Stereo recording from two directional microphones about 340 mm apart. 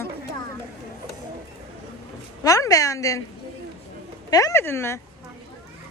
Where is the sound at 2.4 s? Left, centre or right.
Centre.